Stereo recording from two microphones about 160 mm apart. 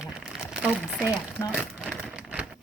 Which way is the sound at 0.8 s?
5° right (ahead or behind).